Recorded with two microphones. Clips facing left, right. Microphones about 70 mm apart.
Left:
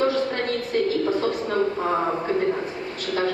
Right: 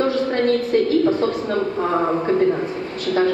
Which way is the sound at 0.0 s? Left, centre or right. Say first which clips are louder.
Right 2 dB; right.